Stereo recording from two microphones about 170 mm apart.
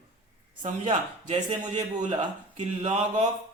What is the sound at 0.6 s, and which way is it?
A man's voice, 45° right (ahead or behind).